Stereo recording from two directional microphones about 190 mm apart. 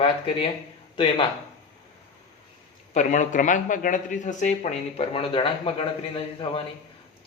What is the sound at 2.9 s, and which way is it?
A man's voice, 40° left (ahead or behind).